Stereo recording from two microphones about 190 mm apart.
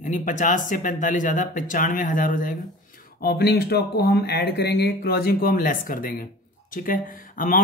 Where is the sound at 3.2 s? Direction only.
55° left (ahead or behind).